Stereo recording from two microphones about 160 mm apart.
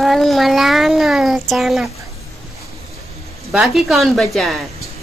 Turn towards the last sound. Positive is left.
turn(degrees=0)  # may be behind; listen again after turning